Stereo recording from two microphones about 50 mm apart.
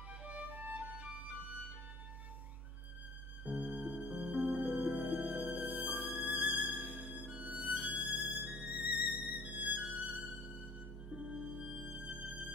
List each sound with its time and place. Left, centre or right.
0.2 s music: right
3.4 s music: right
11.1 s music: centre; by 12.5 s right